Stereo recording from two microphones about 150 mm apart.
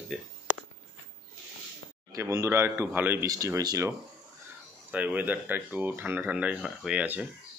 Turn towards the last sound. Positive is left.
turn(degrees=-10)  # may be behind; listen again after turning